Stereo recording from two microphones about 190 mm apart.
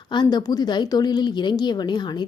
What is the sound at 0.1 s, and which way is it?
A woman's voice, 25° left (ahead or behind).